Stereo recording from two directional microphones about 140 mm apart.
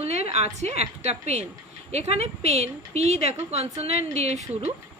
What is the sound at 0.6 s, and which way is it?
A woman's voice, 50° right (ahead or behind).